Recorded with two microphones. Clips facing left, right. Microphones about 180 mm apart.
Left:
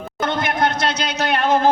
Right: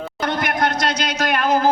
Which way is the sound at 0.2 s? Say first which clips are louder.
Left 1 dB; 25° left (ahead or behind).